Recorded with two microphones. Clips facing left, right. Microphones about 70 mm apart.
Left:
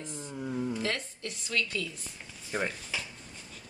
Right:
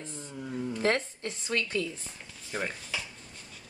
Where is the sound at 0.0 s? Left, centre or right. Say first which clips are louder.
Left 2 dB; centre.